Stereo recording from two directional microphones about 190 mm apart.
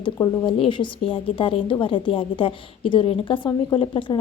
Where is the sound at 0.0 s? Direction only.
25° left (ahead or behind).